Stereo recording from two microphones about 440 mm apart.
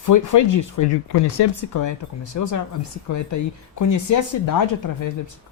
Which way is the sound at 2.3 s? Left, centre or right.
Left.